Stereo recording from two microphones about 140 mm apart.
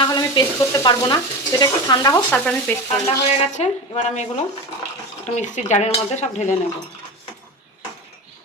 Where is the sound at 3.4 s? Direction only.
55° left (ahead or behind).